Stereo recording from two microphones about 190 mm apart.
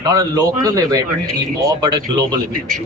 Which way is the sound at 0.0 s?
20° right (ahead or behind).